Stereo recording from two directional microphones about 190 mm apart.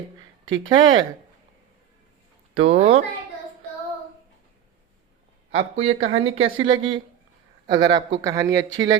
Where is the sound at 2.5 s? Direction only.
30° right (ahead or behind).